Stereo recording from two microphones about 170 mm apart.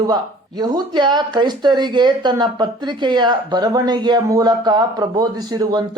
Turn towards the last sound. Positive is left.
turn(degrees=-25)  # may be behind; listen again after turning